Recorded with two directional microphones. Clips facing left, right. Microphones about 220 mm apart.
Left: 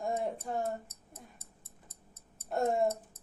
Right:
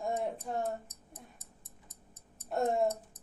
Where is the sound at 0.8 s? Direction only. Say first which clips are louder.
Even; 15° right (ahead or behind).